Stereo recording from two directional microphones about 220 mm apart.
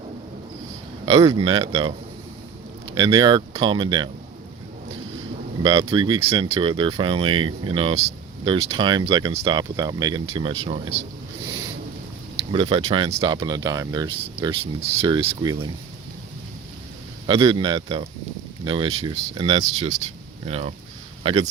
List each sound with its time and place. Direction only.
1.0 s speech: 20° right (ahead or behind)
2.9 s speech: 20° right (ahead or behind)
5.6 s speech: 20° right (ahead or behind)
12.5 s speech: 25° right (ahead or behind)
17.2 s speech: 20° right (ahead or behind)